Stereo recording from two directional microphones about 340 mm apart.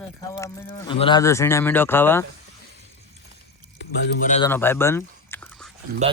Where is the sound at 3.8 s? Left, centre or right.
Left.